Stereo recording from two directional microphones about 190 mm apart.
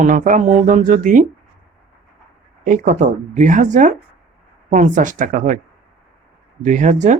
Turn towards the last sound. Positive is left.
turn(degrees=-40)  # may be behind; listen again after turning